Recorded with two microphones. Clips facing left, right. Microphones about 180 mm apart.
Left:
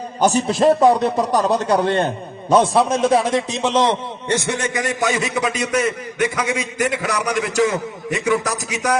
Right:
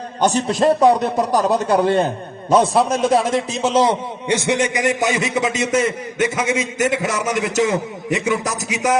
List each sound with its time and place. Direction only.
0.2 s a man's voice: 5° left (ahead or behind); by 9.0 s 20° right (ahead or behind)